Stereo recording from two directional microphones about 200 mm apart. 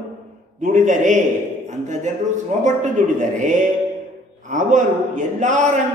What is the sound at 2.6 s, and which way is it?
Speech, 40° right (ahead or behind).